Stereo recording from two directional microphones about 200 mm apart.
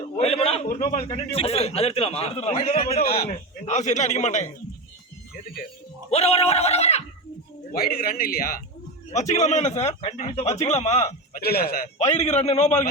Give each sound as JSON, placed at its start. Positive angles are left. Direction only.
{"t": 0.2, "sound": "a sound", "side_deg": 30}
{"t": 0.9, "sound": "a man's voice", "side_deg": 30}
{"t": 6.1, "sound": "a man's voice", "side_deg": 30}
{"t": 7.7, "sound": "a man's voice", "side_deg": 50}
{"t": 9.1, "sound": "a man's voice", "side_deg": 35}
{"t": 11.3, "sound": "a man's voice", "side_deg": 50}
{"t": 11.9, "sound": "a man's voice", "side_deg": 35}